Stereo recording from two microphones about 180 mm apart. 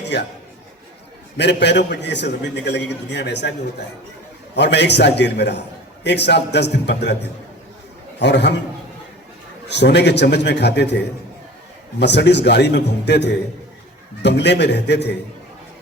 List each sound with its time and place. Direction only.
0.0 s a sound: 70° left (ahead or behind)
1.4 s a man's voice: 70° left (ahead or behind)
4.5 s a man's voice: 70° left (ahead or behind)
9.6 s a man's voice: 70° left (ahead or behind)
11.9 s a man's voice: 70° left (ahead or behind)